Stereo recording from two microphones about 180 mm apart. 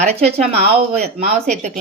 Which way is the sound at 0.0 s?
35° right (ahead or behind).